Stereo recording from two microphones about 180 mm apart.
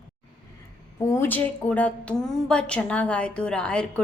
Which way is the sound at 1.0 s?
15° left (ahead or behind).